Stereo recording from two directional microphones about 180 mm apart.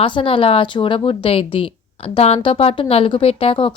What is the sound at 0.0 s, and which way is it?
A woman's voice, 30° left (ahead or behind).